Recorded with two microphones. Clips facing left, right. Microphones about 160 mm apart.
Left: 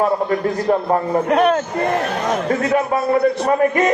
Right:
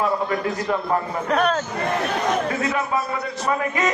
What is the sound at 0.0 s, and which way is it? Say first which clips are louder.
A man's voice: left 5 dB; 45° left (ahead or behind).